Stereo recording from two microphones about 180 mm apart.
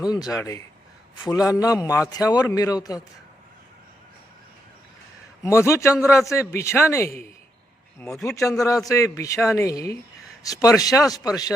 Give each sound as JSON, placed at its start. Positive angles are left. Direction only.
{"t": 0.1, "sound": "a man's voice", "side_deg": 20}
{"t": 5.4, "sound": "a man's voice", "side_deg": 15}